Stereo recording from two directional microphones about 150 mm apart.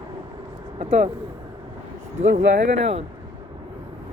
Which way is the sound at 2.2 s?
50° right (ahead or behind).